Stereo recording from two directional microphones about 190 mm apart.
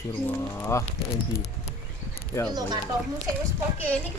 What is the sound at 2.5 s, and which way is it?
Speech, 20° right (ahead or behind).